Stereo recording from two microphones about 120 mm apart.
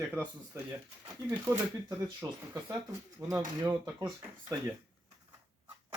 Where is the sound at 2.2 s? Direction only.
35° right (ahead or behind).